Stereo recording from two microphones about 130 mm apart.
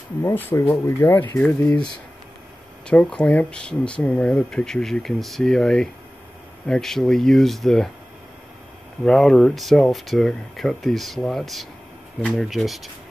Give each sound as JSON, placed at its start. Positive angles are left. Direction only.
{"t": 0.2, "sound": "speech", "side_deg": 15}
{"t": 2.9, "sound": "speech", "side_deg": 10}
{"t": 9.0, "sound": "speech", "side_deg": 5}